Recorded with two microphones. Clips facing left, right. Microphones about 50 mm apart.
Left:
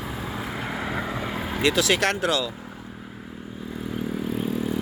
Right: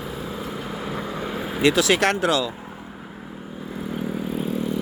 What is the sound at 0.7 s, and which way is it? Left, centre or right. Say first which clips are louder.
Vehicle: left 2 dB; left.